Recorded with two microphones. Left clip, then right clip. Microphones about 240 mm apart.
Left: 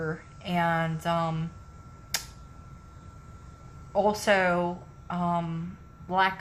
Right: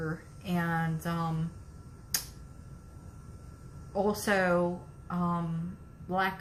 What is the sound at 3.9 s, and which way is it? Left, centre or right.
A woman's voice, left.